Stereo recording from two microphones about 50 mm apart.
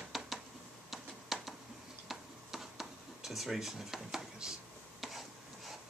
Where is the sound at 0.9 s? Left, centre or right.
Centre.